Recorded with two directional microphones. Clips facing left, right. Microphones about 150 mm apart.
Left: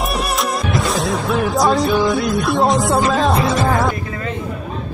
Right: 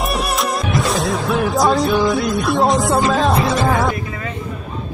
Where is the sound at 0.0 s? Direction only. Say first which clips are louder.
Even; centre (ahead or behind).